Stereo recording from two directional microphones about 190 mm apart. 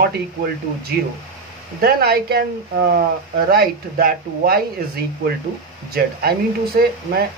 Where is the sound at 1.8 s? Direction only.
55° right (ahead or behind).